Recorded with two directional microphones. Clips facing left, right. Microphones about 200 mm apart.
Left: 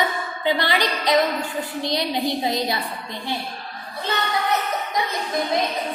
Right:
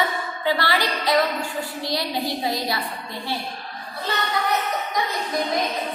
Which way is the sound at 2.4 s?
20° left (ahead or behind).